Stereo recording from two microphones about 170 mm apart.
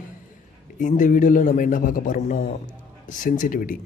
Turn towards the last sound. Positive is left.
turn(degrees=55)  # may be behind; listen again after turning